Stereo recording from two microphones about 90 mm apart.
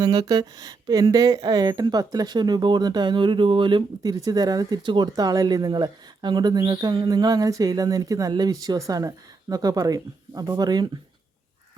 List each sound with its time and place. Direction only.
0.0 s speech: 55° right (ahead or behind)
4.8 s speech: 65° right (ahead or behind)
5.1 s speech: 45° right (ahead or behind)